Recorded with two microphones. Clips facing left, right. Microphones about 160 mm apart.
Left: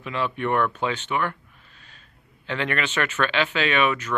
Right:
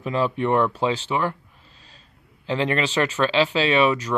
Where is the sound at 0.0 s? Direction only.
35° right (ahead or behind).